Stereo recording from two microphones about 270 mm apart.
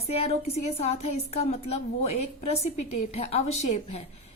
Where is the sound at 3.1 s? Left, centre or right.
Left.